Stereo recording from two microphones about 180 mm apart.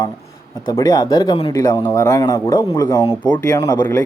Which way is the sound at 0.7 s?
20° left (ahead or behind).